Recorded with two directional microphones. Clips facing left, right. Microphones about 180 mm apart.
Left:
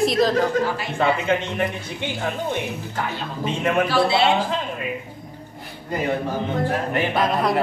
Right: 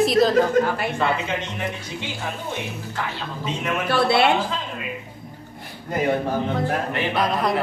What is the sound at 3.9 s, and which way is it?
Speech, 60° right (ahead or behind).